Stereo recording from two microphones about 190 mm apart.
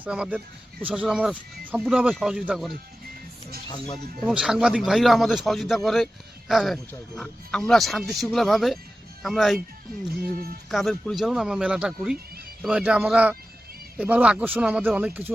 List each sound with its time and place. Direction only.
0.0 s speech: 5° right (ahead or behind)
4.2 s speech: centre (ahead or behind)
10.2 s speech: 50° right (ahead or behind)
10.7 s speech: centre (ahead or behind)